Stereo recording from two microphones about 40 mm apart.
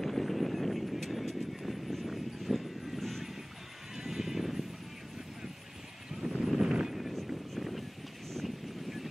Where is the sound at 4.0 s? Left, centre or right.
Centre.